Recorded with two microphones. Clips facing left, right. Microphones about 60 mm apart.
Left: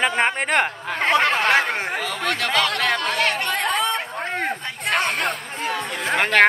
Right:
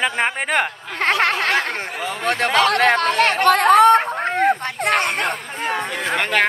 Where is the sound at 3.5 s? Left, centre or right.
Right.